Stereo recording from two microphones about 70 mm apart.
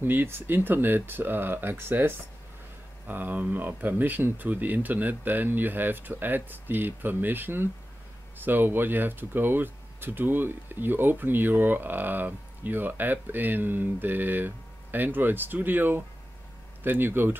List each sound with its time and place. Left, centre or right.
0.0 s speech: right